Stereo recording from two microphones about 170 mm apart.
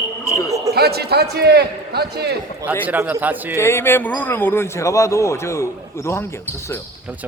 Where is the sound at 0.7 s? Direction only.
70° right (ahead or behind).